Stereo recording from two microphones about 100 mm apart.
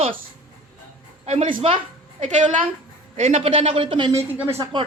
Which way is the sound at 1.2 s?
85° right.